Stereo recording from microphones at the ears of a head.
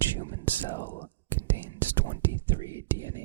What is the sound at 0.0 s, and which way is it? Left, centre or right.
Whispering, right.